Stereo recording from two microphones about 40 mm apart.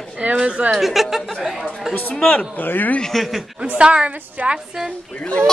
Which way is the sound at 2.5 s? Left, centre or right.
Left.